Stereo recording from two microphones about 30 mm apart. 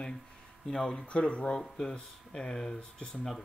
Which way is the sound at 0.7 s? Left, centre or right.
Left.